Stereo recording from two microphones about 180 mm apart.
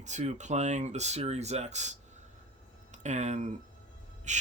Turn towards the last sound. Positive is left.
turn(degrees=-40)  # may be behind; listen again after turning